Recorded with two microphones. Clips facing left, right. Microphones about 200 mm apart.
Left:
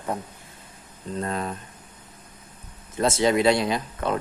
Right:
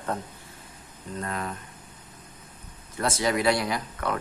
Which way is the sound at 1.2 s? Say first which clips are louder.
Left 4 dB; 30° left (ahead or behind).